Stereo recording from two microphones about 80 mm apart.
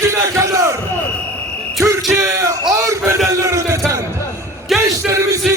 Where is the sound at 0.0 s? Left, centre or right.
Right.